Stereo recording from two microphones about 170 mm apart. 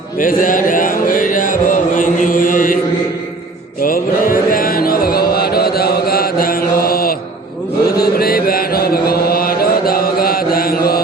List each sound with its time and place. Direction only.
0.2 s speech: 55° left (ahead or behind)
3.8 s mantra: 55° left (ahead or behind)
7.9 s chant: 65° left (ahead or behind)